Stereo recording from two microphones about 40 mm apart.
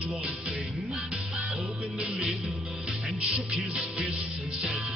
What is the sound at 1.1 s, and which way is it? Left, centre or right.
Music, right.